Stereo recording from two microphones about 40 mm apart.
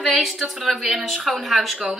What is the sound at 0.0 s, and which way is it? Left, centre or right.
A woman's voice, centre.